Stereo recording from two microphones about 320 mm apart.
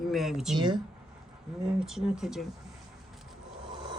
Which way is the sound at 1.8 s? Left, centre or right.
Centre.